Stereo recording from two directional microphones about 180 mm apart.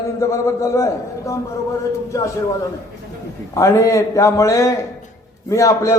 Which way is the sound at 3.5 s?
15° left (ahead or behind).